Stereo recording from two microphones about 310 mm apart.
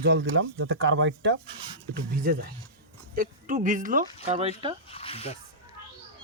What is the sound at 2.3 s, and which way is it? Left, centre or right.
Speech, right.